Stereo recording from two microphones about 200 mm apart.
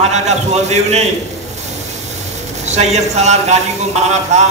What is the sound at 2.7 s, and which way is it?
Speech, 35° right (ahead or behind).